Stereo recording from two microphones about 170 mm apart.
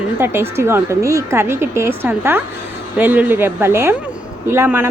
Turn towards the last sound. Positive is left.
turn(degrees=-15)  # may be behind; listen again after turning